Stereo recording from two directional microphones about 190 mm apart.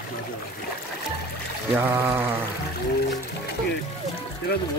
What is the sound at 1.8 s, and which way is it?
Speech, 10° right (ahead or behind).